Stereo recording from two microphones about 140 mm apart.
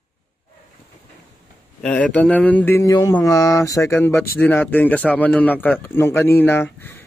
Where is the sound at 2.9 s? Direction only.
25° left (ahead or behind).